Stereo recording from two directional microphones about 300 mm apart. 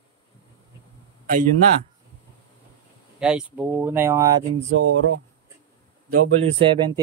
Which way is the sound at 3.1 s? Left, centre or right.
Centre.